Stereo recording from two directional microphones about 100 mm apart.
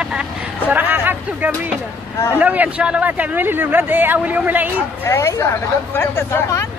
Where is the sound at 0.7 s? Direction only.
20° right (ahead or behind).